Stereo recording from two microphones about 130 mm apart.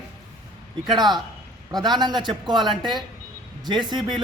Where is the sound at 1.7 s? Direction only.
35° right (ahead or behind).